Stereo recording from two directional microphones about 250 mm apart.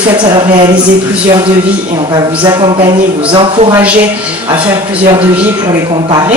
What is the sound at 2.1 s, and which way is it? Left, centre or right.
A woman's voice, centre.